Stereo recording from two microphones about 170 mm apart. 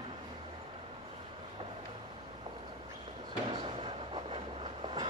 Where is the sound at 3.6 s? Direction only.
30° right (ahead or behind).